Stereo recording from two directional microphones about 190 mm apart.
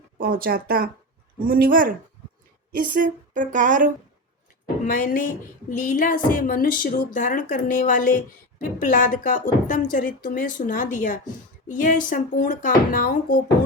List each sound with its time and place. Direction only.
0.2 s speech: 50° right (ahead or behind)
4.9 s a woman's voice: 45° left (ahead or behind)